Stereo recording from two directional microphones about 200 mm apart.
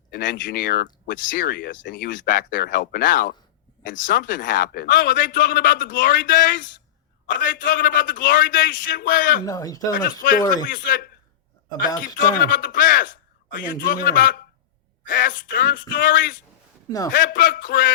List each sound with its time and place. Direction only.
0.1 s a man's voice: 40° left (ahead or behind)
9.4 s speech: 20° left (ahead or behind)
9.9 s speech: 45° left (ahead or behind)
12.2 s a man's voice: 40° left (ahead or behind)